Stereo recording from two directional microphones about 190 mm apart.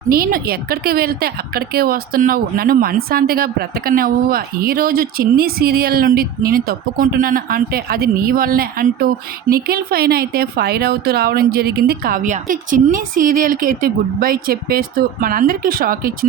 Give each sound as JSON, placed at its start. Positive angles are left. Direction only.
{"t": 0.1, "sound": "a woman's voice", "side_deg": -50}